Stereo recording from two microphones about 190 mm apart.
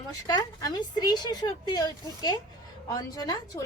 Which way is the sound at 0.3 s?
20° left (ahead or behind).